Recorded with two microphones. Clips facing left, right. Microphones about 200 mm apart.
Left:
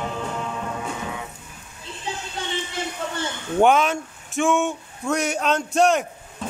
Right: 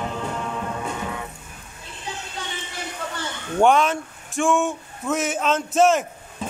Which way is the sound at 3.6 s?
Centre (ahead or behind).